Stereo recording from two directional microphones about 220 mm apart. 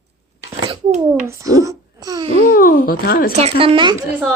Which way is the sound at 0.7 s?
25° right (ahead or behind).